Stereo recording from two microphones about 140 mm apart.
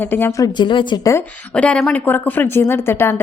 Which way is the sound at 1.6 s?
5° left (ahead or behind).